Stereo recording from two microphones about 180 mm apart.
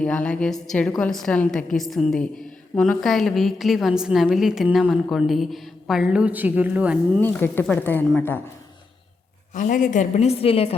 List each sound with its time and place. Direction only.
0.0 s a woman's voice: 5° left (ahead or behind)
7.2 s speech: 10° left (ahead or behind)
9.6 s a woman's voice: 45° left (ahead or behind)